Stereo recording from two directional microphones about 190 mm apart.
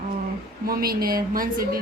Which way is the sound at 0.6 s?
50° right (ahead or behind).